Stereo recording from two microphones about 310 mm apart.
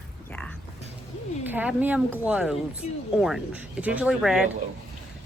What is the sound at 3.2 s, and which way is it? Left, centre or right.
A woman's voice, centre.